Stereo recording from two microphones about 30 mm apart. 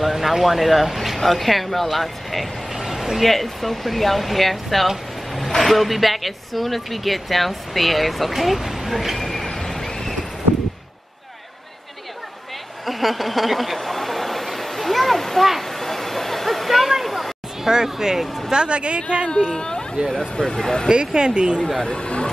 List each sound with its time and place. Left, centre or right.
0.0 s speech: centre
2.7 s a sound: centre
3.2 s speech: centre
9.7 s a sound: centre
12.8 s a sound: centre
17.6 s speech: centre
18.5 s speech: right
19.5 s speech: left
20.9 s speech: right
21.7 s speech: left